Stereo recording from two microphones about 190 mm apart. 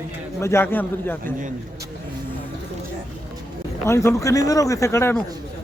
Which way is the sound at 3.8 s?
15° left (ahead or behind).